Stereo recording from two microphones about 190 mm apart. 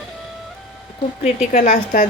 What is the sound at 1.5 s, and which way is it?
Speech, 40° left (ahead or behind).